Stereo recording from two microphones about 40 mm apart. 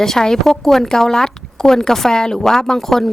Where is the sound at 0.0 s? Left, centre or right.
Centre.